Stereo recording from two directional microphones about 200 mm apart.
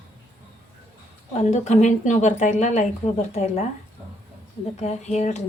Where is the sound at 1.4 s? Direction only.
35° left (ahead or behind).